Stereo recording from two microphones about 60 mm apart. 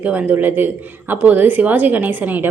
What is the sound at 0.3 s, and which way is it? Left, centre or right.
A woman's voice, right.